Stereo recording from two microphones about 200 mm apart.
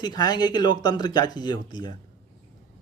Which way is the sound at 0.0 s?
20° left (ahead or behind).